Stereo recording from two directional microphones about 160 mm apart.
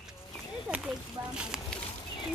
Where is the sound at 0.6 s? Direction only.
10° right (ahead or behind).